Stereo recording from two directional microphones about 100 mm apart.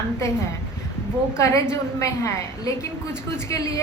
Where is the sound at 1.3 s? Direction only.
30° left (ahead or behind).